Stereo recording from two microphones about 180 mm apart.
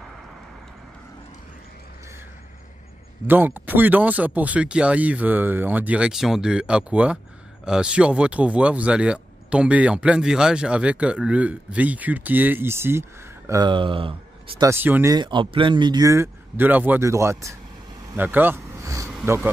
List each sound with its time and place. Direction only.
3.3 s speech: 10° right (ahead or behind); by 14.7 s 30° right (ahead or behind)
14.7 s speech: 10° right (ahead or behind)
15.1 s speech: 25° right (ahead or behind)